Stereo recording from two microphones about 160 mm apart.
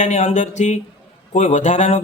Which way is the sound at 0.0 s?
45° left (ahead or behind).